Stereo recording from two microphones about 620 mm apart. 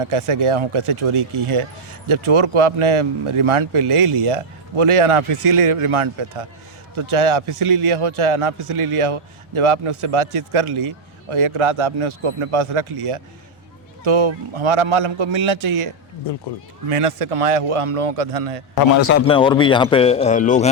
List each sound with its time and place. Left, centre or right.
0.0 s a man's voice: right
18.7 s a man's voice: left
19.0 s speech: centre